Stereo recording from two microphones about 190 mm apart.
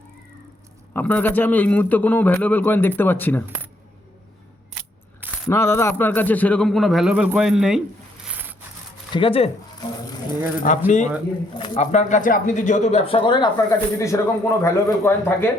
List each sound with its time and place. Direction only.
0.9 s a man's voice: 10° left (ahead or behind)
5.2 s a sound: 5° right (ahead or behind)
5.5 s speech: 15° left (ahead or behind); by 7.8 s 5° right (ahead or behind)
8.3 s a sound: 10° right (ahead or behind)
9.1 s speech: 30° left (ahead or behind)
10.6 s speech: 40° left (ahead or behind); by 15.4 s 15° left (ahead or behind)